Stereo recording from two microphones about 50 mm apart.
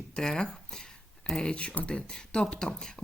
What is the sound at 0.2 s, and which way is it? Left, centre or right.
Speech, centre.